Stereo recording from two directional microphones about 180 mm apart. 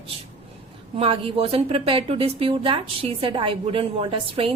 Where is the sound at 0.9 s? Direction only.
30° right (ahead or behind).